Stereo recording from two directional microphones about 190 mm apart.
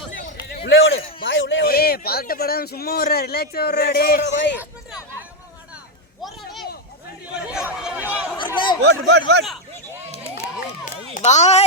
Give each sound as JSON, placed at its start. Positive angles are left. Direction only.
{"t": 0.6, "sound": "a sound", "side_deg": 65}
{"t": 1.2, "sound": "speech", "side_deg": 75}
{"t": 6.2, "sound": "a sound", "side_deg": 0}
{"t": 7.3, "sound": "chatter", "side_deg": -5}
{"t": 8.5, "sound": "chatter", "side_deg": 25}
{"t": 8.8, "sound": "speech", "side_deg": -65}
{"t": 11.1, "sound": "speech", "side_deg": 40}